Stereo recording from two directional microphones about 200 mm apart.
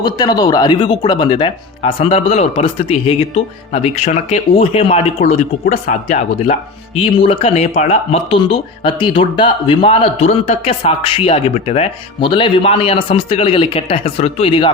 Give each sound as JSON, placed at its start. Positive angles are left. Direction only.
{"t": 0.0, "sound": "speech", "side_deg": 20}